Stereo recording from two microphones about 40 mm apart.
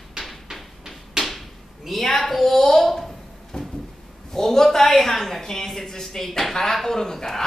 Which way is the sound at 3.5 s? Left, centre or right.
Centre.